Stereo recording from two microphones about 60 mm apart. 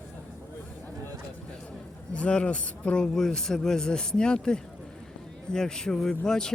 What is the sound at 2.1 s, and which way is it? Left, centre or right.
Speech, centre.